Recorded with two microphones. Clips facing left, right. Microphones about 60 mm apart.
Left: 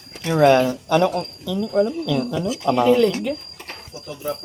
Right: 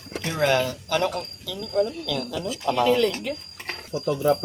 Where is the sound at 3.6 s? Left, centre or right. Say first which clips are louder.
Right 8 dB; right.